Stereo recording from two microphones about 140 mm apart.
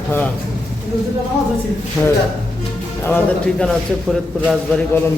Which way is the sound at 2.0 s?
15° left (ahead or behind).